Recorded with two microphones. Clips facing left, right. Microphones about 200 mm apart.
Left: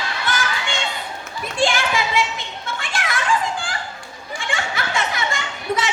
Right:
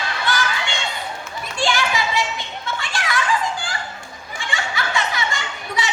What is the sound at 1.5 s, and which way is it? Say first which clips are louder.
Children playing: left 2 dB; 50° left (ahead or behind).